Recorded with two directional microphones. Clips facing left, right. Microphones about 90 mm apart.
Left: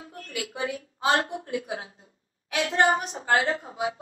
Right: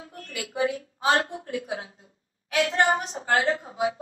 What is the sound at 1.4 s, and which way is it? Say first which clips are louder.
A woman's voice: even; 35° left (ahead or behind).